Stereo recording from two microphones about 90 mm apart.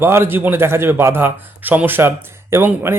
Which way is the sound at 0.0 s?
30° right (ahead or behind).